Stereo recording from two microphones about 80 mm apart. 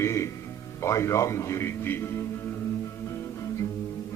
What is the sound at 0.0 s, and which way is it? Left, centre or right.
Music, left.